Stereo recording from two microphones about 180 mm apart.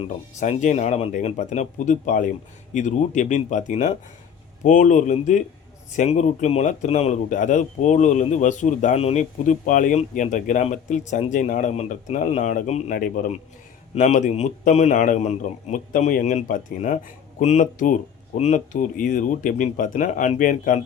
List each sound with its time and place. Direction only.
0.0 s speech: 40° left (ahead or behind)